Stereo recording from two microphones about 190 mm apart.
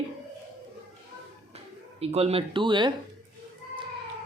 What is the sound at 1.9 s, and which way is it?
Speech, 30° right (ahead or behind).